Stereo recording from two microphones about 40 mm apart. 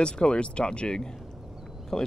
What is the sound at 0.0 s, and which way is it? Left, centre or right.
Speech, left.